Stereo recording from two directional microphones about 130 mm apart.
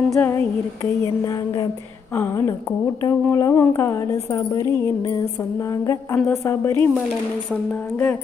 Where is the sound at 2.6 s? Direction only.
20° left (ahead or behind).